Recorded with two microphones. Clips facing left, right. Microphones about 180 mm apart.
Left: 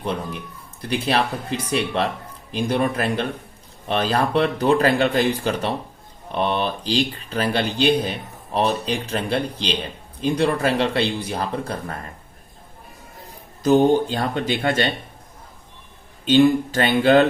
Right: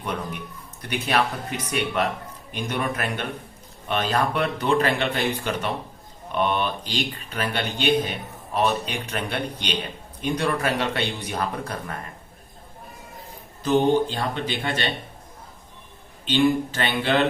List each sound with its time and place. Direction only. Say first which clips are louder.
0.0 s a man's voice: left 3 dB; 30° left (ahead or behind)
13.6 s speech: left 4 dB; 40° left (ahead or behind)
16.2 s speech: left 5 dB; 45° left (ahead or behind)